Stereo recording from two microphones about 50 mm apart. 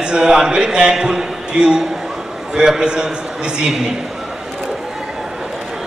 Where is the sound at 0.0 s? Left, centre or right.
Centre.